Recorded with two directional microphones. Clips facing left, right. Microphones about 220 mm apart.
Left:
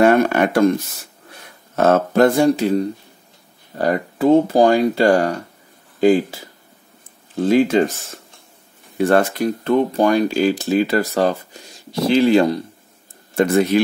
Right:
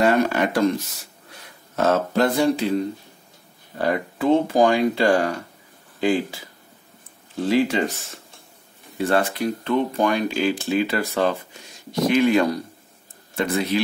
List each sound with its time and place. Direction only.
0.0 s speech: 55° left (ahead or behind)
1.8 s speech: 50° left (ahead or behind)
7.4 s speech: 45° left (ahead or behind)
8.9 s speech: 50° left (ahead or behind); by 12.6 s 30° left (ahead or behind)